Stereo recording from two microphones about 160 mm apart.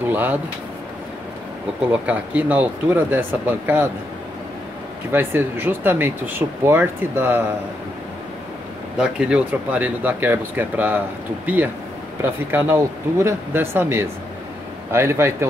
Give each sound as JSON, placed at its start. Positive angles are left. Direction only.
{"t": 0.1, "sound": "speech", "side_deg": -10}
{"t": 1.9, "sound": "speech", "side_deg": -10}
{"t": 5.1, "sound": "speech", "side_deg": -15}
{"t": 8.9, "sound": "speech", "side_deg": -5}